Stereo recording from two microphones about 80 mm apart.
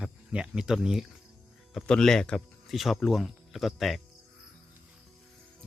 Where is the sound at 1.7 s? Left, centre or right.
Centre.